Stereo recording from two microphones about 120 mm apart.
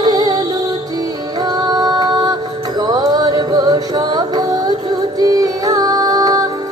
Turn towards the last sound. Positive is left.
turn(degrees=-30)  # may be behind; listen again after turning